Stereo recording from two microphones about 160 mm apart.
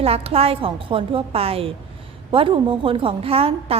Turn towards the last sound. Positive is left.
turn(degrees=-35)  # may be behind; listen again after turning